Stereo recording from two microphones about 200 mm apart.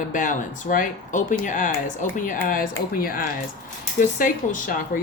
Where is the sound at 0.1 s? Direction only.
40° left (ahead or behind).